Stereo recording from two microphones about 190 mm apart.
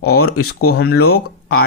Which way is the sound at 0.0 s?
55° left (ahead or behind).